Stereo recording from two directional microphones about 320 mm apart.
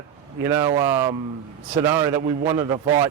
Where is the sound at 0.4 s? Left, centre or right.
Centre.